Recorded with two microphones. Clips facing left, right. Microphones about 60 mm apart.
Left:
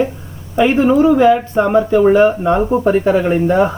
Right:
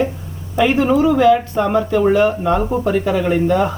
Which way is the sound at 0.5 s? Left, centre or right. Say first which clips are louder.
Left 3 dB; left.